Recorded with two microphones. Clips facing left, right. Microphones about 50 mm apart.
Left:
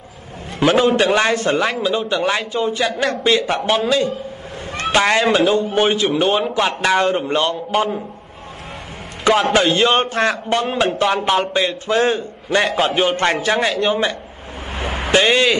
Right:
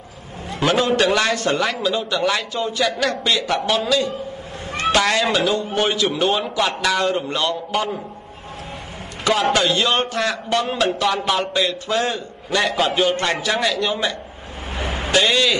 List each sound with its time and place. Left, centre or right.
0.6 s a man's voice: centre
0.9 s a man's voice: left
9.5 s a man's voice: left
14.8 s vehicle: left
15.0 s speech: left